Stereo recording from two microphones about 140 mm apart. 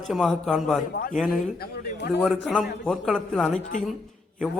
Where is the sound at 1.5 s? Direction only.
90° left.